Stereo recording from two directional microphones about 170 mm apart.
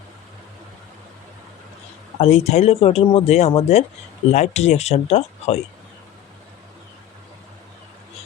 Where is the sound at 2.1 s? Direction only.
40° left (ahead or behind).